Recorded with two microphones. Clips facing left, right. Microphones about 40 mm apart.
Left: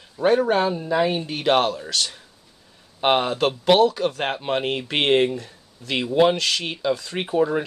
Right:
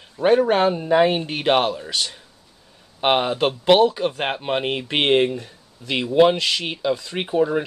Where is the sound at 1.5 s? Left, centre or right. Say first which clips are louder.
Even; centre.